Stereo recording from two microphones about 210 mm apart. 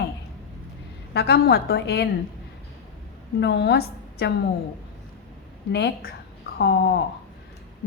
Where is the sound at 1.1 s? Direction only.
50° left (ahead or behind).